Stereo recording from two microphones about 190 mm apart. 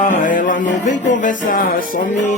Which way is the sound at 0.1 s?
45° left (ahead or behind).